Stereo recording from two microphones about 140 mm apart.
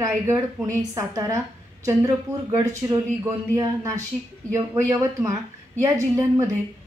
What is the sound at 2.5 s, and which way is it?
A woman's voice, 20° right (ahead or behind).